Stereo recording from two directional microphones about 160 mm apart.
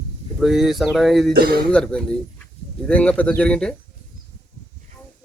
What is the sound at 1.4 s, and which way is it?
Speech, 70° right (ahead or behind).